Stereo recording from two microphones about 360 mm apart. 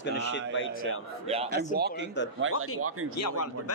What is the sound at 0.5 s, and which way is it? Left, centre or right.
Speech, left.